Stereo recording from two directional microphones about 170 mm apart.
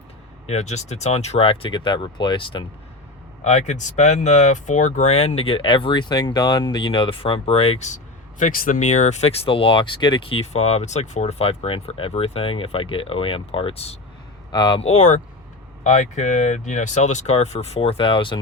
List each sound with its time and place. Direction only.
0.4 s speech: 40° left (ahead or behind)
3.4 s speech: 40° left (ahead or behind)